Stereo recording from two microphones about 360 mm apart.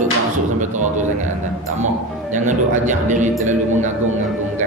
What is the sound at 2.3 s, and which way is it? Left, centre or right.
Speech, centre.